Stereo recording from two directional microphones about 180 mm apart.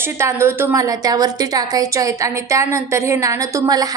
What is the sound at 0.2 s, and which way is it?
A woman's voice, 15° right (ahead or behind).